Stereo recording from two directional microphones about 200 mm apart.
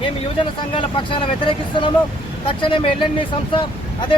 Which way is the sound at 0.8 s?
25° left (ahead or behind).